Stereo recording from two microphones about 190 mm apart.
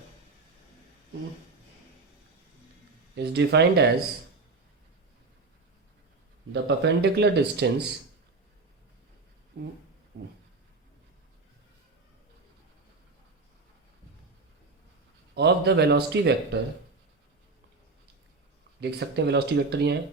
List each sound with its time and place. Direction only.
3.2 s speech: 60° right (ahead or behind)
6.5 s speech: 65° right (ahead or behind)
9.5 s speech: 65° right (ahead or behind)
15.4 s speech: 60° right (ahead or behind)
18.8 s speech: 60° right (ahead or behind)